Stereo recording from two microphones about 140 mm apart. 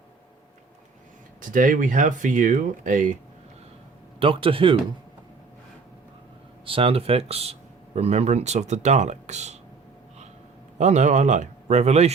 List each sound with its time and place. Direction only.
1.4 s speech: 75° right (ahead or behind)
4.2 s speech: 40° right (ahead or behind)
6.7 s speech: 40° right (ahead or behind)
10.8 s speech: 55° right (ahead or behind)